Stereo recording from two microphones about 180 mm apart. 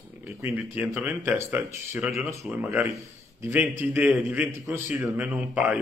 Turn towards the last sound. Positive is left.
turn(degrees=-10)  # may be behind; listen again after turning